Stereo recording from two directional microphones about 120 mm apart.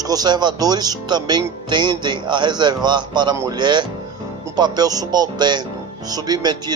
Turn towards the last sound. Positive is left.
turn(degrees=-35)  # may be behind; listen again after turning